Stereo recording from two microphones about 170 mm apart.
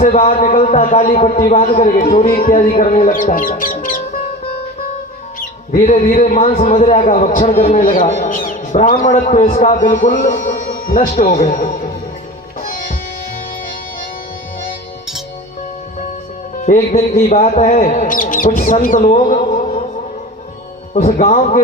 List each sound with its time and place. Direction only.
0.1 s a man's voice: 40° left (ahead or behind)
1.6 s a man's voice: 55° left (ahead or behind)
2.5 s a man's voice: 40° left (ahead or behind)
3.6 s music: 55° left (ahead or behind)
5.4 s a man's voice: 45° left (ahead or behind)
7.8 s a man's voice: 55° left (ahead or behind)
11.1 s a man's voice: 40° left (ahead or behind)
12.5 s music: 50° left (ahead or behind)
16.6 s a man's voice: 45° left (ahead or behind)
20.9 s a man's voice: 40° left (ahead or behind)